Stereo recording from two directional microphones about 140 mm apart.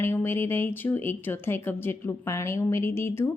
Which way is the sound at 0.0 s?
15° left (ahead or behind).